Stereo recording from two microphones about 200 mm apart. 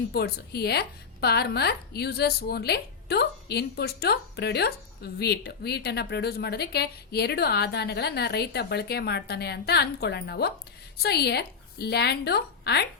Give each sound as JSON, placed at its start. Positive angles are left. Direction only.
{"t": 0.1, "sound": "a woman's voice", "side_deg": 55}